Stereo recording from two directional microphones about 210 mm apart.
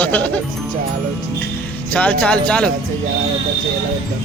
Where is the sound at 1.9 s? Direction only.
5° left (ahead or behind).